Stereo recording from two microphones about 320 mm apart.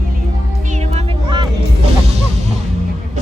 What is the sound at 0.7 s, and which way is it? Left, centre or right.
Music, right.